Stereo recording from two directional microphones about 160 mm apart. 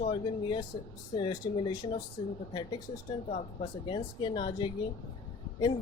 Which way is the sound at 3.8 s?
30° left (ahead or behind).